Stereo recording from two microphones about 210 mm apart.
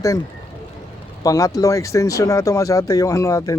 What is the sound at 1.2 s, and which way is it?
Speech, 15° left (ahead or behind).